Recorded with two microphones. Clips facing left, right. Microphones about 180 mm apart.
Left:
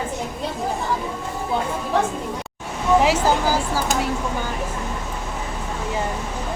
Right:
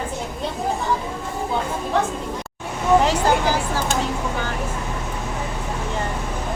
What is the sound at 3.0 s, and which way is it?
Speech, 10° left (ahead or behind).